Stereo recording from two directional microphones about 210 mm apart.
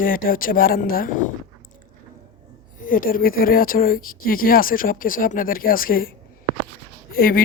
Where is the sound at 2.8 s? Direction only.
40° left (ahead or behind).